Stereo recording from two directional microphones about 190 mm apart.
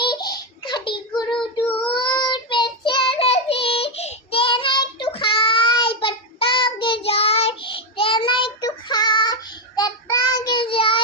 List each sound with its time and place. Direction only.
0.0 s child singing: 20° left (ahead or behind)